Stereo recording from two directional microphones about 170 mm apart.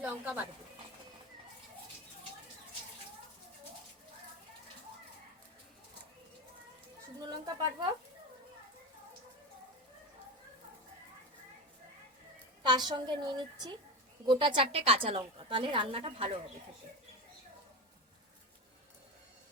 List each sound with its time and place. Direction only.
0.0 s speech: 5° right (ahead or behind)
7.2 s a sound: 25° right (ahead or behind)
12.6 s a woman's voice: 25° right (ahead or behind)